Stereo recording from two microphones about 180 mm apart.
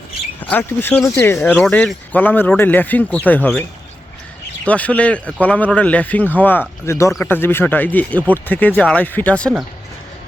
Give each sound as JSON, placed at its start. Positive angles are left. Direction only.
{"t": 0.3, "sound": "speech", "side_deg": 10}
{"t": 4.6, "sound": "speech", "side_deg": 10}